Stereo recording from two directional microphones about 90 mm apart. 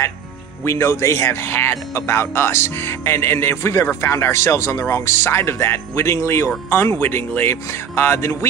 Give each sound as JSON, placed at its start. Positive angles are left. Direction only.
{"t": 0.7, "sound": "speech", "side_deg": 30}